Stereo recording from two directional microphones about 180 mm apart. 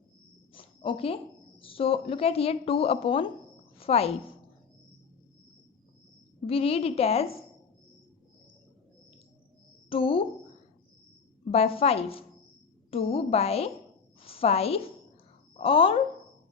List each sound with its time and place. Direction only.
0.5 s a woman's voice: 30° left (ahead or behind)
6.5 s a woman's voice: 35° left (ahead or behind)
9.9 s a woman's voice: 30° left (ahead or behind)
11.5 s a woman's voice: 35° left (ahead or behind)
14.2 s a sound: 30° left (ahead or behind)
15.5 s speech: 30° left (ahead or behind)